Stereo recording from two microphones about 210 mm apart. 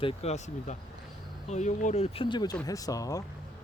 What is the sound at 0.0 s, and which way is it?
Speech, 30° left (ahead or behind).